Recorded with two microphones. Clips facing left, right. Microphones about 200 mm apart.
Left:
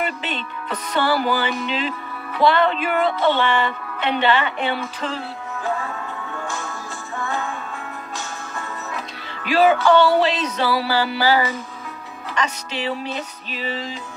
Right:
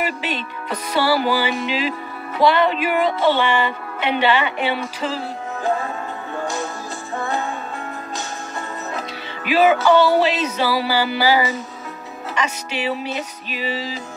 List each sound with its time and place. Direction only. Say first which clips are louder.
0.0 s a woman's voice: right 2 dB; 10° right (ahead or behind)
6.3 s music: right 7 dB; 40° right (ahead or behind)
9.5 s music: right 1 dB; 5° right (ahead or behind)
9.8 s a woman's voice: right 1 dB; 5° right (ahead or behind)